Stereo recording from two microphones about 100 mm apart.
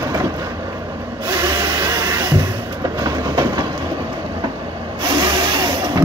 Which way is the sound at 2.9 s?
40° right (ahead or behind).